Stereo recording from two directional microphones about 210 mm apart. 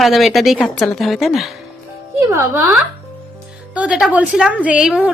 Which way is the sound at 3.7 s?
5° right (ahead or behind).